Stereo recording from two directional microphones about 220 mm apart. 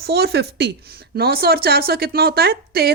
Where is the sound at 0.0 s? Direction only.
45° right (ahead or behind).